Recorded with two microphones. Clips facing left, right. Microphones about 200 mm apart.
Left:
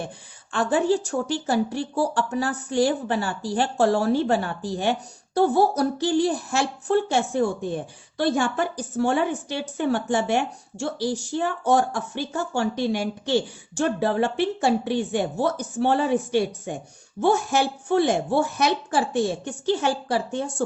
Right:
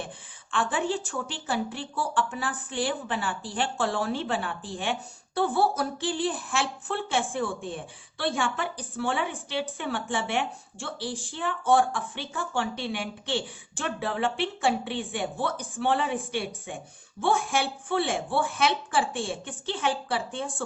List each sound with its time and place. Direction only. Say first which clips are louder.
0.5 s a woman's voice: left 7 dB; 40° left (ahead or behind)